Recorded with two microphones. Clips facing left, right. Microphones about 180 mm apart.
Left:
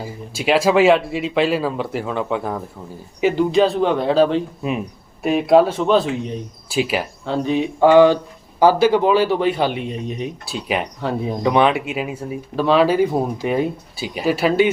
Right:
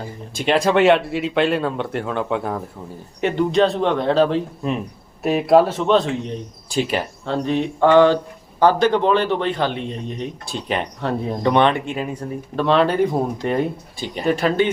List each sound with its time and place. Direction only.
0.0 s speech: 5° left (ahead or behind)